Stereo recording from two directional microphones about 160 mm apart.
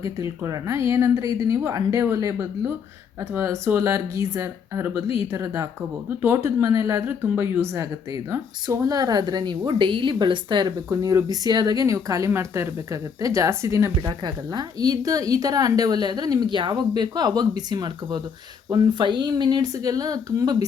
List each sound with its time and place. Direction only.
0.0 s speech: 20° right (ahead or behind)